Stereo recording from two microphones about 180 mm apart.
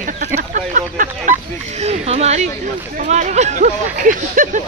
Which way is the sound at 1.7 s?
35° right (ahead or behind).